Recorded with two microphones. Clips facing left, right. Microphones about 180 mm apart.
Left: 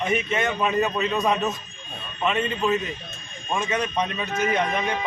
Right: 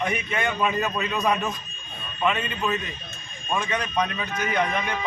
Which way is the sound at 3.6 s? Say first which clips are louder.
Left 1 dB; 25° left (ahead or behind).